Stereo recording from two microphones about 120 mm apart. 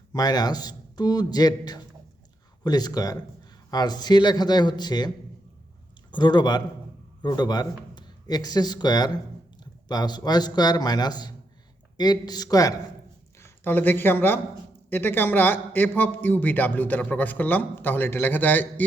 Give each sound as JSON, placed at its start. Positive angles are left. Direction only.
{"t": 0.1, "sound": "a man's voice", "side_deg": 35}
{"t": 13.4, "sound": "a man's voice", "side_deg": 15}